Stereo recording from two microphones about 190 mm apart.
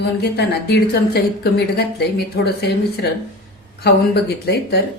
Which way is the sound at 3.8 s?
60° left (ahead or behind).